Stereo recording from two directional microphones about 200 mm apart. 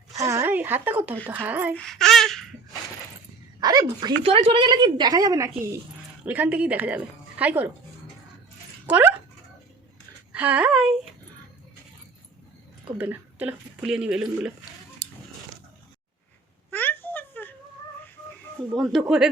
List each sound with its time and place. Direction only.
0.1 s a sound: 15° right (ahead or behind)
1.2 s a woman's voice: 10° right (ahead or behind)
1.7 s a sound: 5° left (ahead or behind)
3.6 s a woman's voice: 20° right (ahead or behind)
8.9 s speech: 10° right (ahead or behind)
10.3 s a woman's voice: 5° right (ahead or behind)
13.0 s speech: 10° right (ahead or behind)
16.7 s a sound: 10° left (ahead or behind)
18.8 s speech: centre (ahead or behind)